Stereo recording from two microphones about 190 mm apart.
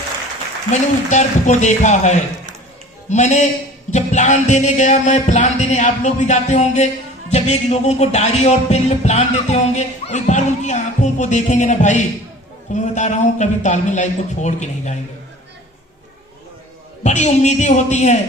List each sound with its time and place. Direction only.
0.7 s music: 40° left (ahead or behind)
17.0 s music: 35° left (ahead or behind)